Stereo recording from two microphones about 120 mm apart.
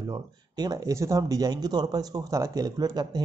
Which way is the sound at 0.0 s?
35° right (ahead or behind).